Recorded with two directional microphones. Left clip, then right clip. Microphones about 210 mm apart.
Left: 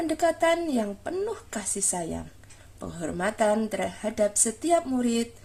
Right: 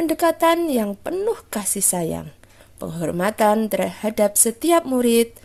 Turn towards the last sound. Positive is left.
turn(degrees=-50)  # may be behind; listen again after turning